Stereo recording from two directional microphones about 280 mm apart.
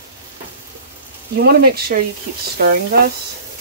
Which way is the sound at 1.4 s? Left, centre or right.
Right.